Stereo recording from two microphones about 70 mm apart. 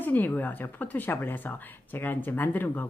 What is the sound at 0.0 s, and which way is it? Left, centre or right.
Speech, left.